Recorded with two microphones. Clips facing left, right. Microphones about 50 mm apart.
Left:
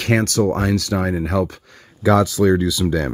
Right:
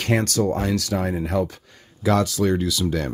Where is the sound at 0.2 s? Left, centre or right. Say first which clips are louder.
Left 4 dB; left.